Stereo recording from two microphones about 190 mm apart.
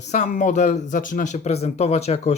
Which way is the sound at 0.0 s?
40° left (ahead or behind).